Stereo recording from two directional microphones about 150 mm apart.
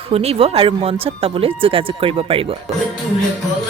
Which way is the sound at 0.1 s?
45° right (ahead or behind).